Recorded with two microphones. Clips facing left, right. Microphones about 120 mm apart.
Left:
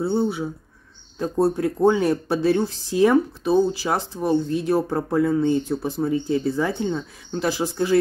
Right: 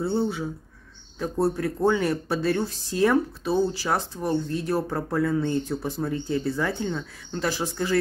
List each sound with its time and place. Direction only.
0.0 s speech: 15° left (ahead or behind)